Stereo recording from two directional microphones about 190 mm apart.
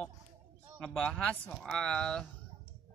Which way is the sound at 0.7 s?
Centre (ahead or behind).